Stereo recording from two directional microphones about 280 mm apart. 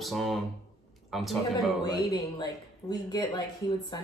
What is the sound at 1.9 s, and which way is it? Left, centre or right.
Speech, centre.